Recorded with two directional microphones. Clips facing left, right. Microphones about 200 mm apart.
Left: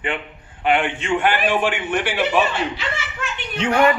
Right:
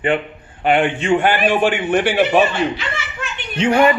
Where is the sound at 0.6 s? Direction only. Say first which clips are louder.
Right 4 dB; 40° right (ahead or behind).